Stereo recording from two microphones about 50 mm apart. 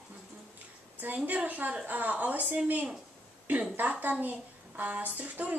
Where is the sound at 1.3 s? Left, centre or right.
Right.